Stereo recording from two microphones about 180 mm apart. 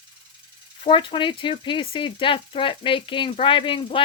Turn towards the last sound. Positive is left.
turn(degrees=30)  # may be behind; listen again after turning